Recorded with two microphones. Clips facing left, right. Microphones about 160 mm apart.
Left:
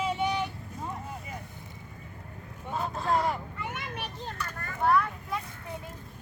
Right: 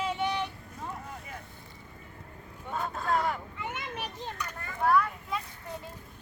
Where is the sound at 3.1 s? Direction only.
10° left (ahead or behind).